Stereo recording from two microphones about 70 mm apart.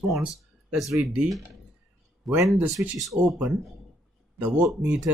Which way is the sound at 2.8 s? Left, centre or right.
Right.